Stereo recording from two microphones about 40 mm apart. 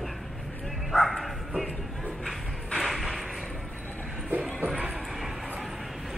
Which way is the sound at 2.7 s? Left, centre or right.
Centre.